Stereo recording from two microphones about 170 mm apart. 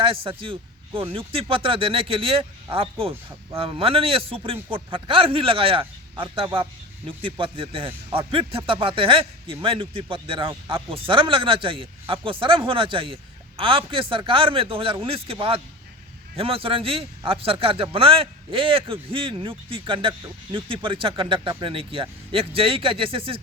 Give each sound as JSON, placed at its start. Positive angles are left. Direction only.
{"t": 0.0, "sound": "speech", "side_deg": -30}